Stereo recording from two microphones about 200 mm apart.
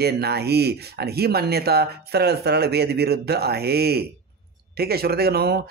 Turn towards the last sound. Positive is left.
turn(degrees=-50)  # may be behind; listen again after turning